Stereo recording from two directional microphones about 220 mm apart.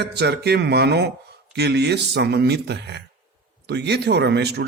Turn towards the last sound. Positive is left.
turn(degrees=-50)  # may be behind; listen again after turning